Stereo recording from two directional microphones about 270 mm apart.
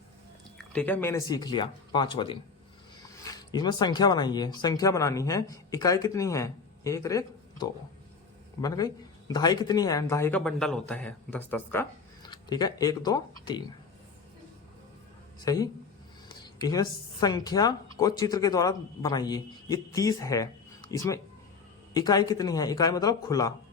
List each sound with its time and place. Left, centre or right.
0.7 s speech: centre
15.4 s speech: centre